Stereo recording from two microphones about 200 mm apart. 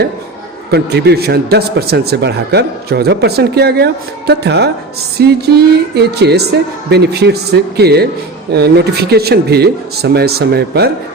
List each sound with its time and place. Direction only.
0.7 s a man's voice: 55° right (ahead or behind)